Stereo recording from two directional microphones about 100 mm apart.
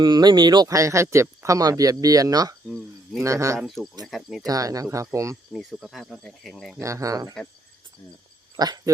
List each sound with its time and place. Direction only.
0.0 s speech: 45° right (ahead or behind)
4.0 s speech: centre (ahead or behind)
4.4 s speech: 35° right (ahead or behind)
5.5 s speech: centre (ahead or behind)
6.7 s speech: 30° right (ahead or behind)
8.5 s speech: 40° right (ahead or behind)